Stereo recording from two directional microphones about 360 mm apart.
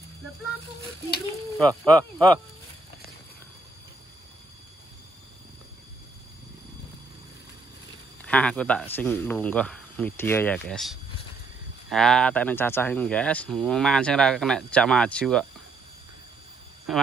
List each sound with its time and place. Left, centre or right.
1.6 s speech: centre
8.3 s speech: centre
16.9 s speech: centre